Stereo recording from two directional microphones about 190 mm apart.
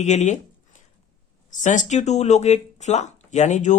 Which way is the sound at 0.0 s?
35° left (ahead or behind).